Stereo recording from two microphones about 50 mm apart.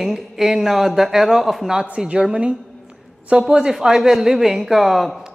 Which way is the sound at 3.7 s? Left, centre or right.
Centre.